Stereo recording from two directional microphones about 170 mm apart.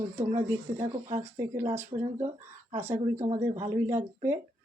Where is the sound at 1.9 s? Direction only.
45° right (ahead or behind).